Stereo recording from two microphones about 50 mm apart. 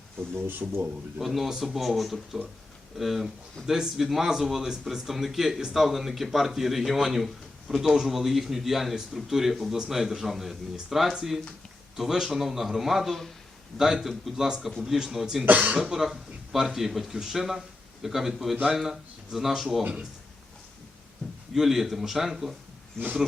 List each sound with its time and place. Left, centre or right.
0.6 s a man's voice: centre
15.4 s speech: right
15.8 s speech: centre
21.5 s speech: centre